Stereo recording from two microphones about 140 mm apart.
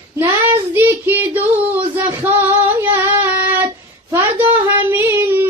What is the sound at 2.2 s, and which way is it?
Female singing, 10° right (ahead or behind).